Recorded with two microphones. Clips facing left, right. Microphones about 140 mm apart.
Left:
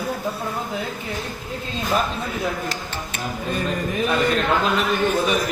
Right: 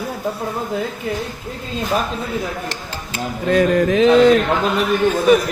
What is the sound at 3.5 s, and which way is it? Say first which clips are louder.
Speech: right 12 dB; 90° right.